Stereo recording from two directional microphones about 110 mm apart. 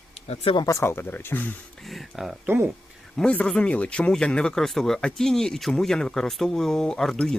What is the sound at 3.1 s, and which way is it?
Speech, 10° left (ahead or behind).